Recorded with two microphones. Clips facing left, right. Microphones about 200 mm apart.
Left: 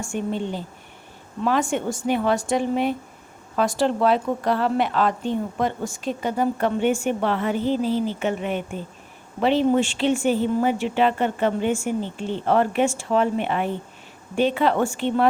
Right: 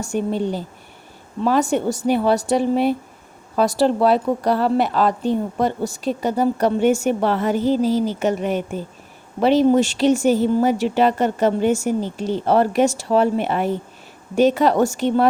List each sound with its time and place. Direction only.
0.0 s a woman's voice: 40° right (ahead or behind)